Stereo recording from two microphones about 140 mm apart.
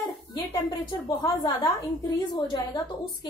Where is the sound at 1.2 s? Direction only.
30° left (ahead or behind).